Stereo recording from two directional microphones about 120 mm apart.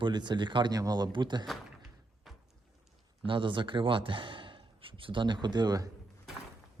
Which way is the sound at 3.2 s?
45° right (ahead or behind).